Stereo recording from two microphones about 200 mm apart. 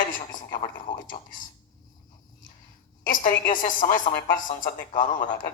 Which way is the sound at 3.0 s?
45° left (ahead or behind).